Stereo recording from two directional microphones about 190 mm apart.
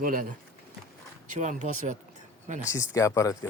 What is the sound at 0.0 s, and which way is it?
Speech, 45° right (ahead or behind).